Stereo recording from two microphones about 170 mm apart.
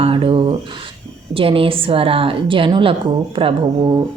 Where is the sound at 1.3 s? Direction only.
30° right (ahead or behind).